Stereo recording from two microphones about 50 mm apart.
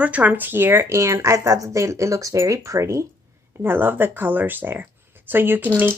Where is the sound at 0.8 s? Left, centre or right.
Right.